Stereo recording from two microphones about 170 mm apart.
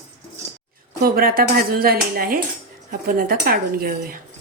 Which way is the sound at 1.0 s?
60° right (ahead or behind).